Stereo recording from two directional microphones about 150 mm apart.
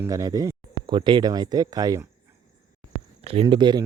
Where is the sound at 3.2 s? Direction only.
40° right (ahead or behind).